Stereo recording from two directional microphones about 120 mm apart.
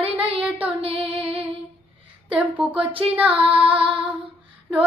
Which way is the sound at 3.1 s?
10° right (ahead or behind).